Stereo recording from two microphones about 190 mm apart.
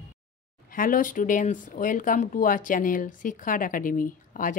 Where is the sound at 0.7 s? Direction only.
45° left (ahead or behind).